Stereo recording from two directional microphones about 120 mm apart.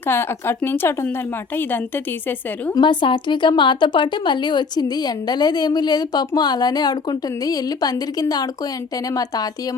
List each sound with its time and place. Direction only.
0.1 s speech: 20° left (ahead or behind)
2.7 s a woman's voice: 40° left (ahead or behind)